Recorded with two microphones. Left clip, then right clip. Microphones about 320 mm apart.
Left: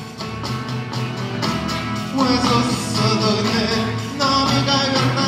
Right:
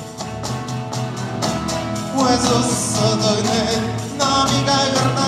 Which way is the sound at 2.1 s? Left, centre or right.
Right.